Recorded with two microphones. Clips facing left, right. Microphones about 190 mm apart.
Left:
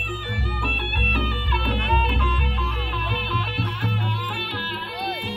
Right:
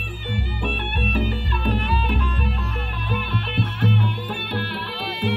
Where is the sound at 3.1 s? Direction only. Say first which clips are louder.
Right 5 dB; 55° right (ahead or behind).